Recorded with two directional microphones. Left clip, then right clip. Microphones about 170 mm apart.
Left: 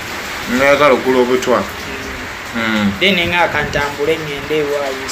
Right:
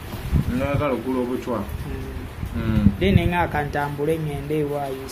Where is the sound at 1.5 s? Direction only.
20° left (ahead or behind).